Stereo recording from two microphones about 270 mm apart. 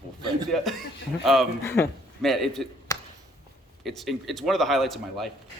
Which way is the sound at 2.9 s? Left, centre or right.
Centre.